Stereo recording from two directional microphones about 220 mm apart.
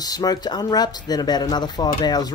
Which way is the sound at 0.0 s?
15° left (ahead or behind).